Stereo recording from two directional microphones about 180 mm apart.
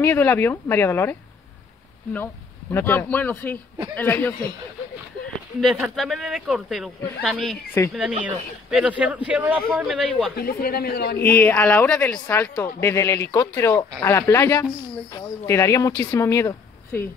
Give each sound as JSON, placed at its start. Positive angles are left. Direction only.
{"t": 0.0, "sound": "speech", "side_deg": 10}
{"t": 2.7, "sound": "speech", "side_deg": 10}
{"t": 5.6, "sound": "a man's voice", "side_deg": 0}
{"t": 10.3, "sound": "a man's voice", "side_deg": 55}
{"t": 11.2, "sound": "speech", "side_deg": 10}